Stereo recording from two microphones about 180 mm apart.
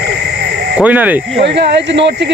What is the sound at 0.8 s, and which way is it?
Speech, 10° right (ahead or behind).